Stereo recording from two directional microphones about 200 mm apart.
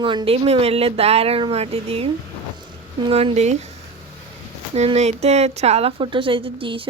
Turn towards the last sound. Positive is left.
turn(degrees=-25)  # may be behind; listen again after turning